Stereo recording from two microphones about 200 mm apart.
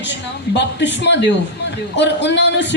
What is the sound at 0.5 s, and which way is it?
A man's voice, 60° left (ahead or behind).